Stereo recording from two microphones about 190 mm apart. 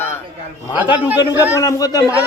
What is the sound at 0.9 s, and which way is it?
Speech, 10° right (ahead or behind).